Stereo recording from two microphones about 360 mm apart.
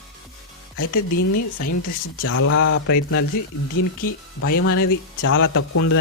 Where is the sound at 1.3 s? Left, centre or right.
Left.